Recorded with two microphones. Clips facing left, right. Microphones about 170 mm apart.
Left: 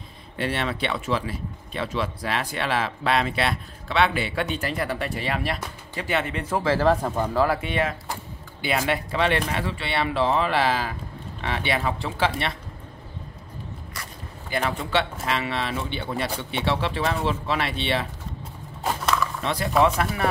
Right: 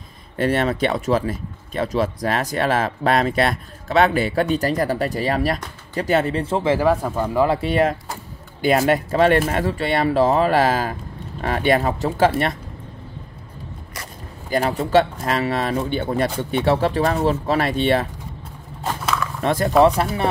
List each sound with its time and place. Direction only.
0.4 s speech: 45° right (ahead or behind); by 7.1 s 10° right (ahead or behind)
7.5 s speech: 40° right (ahead or behind)
14.5 s speech: 35° right (ahead or behind)
19.4 s speech: 45° right (ahead or behind)
19.8 s speech: 35° right (ahead or behind)